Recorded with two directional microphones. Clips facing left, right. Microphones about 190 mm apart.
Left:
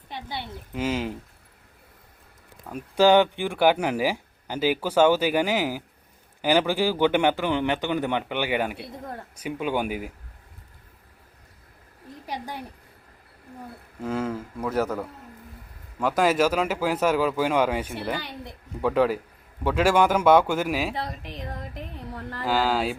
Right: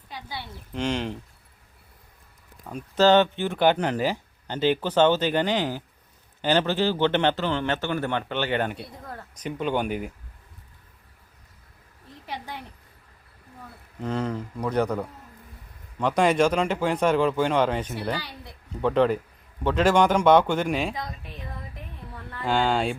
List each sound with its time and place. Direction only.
0.1 s speech: 25° left (ahead or behind)
0.7 s speech: 5° left (ahead or behind)
2.7 s speech: 10° left (ahead or behind)
14.0 s speech: 5° left (ahead or behind)
18.2 s speech: 20° left (ahead or behind)
18.8 s speech: 5° left (ahead or behind)
20.9 s speech: 30° left (ahead or behind)
21.2 s a sound: 80° left
22.1 s speech: 40° left (ahead or behind)
22.4 s speech: 5° left (ahead or behind)